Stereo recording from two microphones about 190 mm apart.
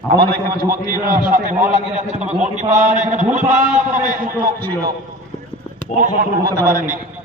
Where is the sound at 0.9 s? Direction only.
45° right (ahead or behind).